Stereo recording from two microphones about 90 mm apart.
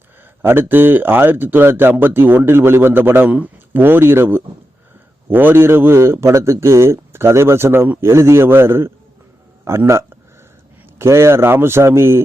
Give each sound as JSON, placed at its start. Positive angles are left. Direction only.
{"t": 0.4, "sound": "speech", "side_deg": -25}